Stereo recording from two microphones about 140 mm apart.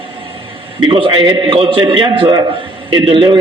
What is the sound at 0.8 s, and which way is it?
A man's voice, 35° right (ahead or behind).